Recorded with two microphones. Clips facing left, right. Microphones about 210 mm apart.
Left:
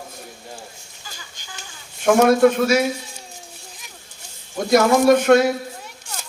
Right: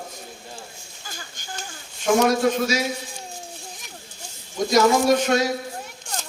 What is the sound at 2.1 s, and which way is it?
Speech, 55° left (ahead or behind).